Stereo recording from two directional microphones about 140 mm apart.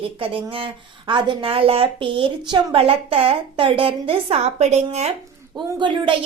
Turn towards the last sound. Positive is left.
turn(degrees=-35)  # may be behind; listen again after turning